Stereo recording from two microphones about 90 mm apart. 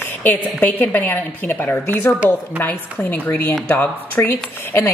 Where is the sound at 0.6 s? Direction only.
20° left (ahead or behind).